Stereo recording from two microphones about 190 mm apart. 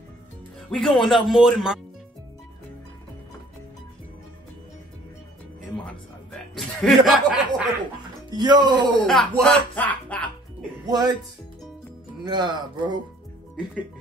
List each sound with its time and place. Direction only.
0.7 s speech: centre (ahead or behind)
6.5 s speech: centre (ahead or behind)
8.3 s speech: 20° right (ahead or behind)
9.0 s speech: 5° left (ahead or behind)
10.9 s speech: 20° right (ahead or behind)
12.2 s speech: 20° right (ahead or behind)